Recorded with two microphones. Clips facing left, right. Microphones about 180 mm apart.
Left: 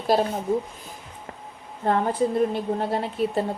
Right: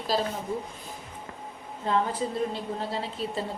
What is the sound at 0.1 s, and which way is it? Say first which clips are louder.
Speech: left 6 dB; 60° left (ahead or behind).